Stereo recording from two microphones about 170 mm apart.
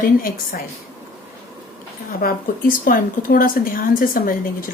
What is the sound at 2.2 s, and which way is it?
Speech, 55° left (ahead or behind).